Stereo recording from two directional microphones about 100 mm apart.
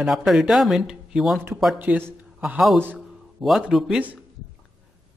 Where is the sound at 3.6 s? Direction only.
5° right (ahead or behind).